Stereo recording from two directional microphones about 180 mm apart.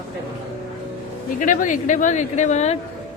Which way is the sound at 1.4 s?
45° left (ahead or behind).